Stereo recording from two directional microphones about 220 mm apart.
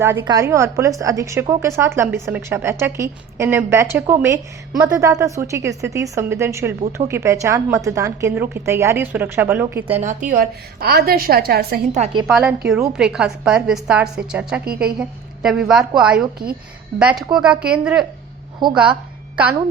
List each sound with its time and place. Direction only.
0.0 s a woman's voice: 10° right (ahead or behind)
10.0 s a woman's voice: 35° right (ahead or behind)
12.3 s a woman's voice: 5° right (ahead or behind)